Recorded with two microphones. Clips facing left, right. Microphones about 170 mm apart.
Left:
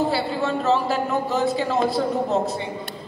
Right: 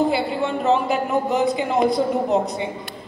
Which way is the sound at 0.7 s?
20° right (ahead or behind).